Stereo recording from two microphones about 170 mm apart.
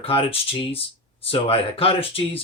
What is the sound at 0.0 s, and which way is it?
Speech, 30° left (ahead or behind).